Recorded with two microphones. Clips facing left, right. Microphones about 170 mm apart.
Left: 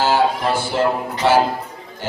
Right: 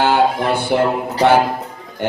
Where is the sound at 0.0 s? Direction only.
60° right (ahead or behind).